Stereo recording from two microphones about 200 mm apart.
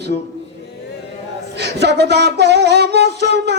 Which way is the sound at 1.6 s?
55° right (ahead or behind).